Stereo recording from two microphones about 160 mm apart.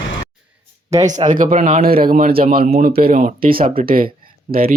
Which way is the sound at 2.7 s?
50° right (ahead or behind).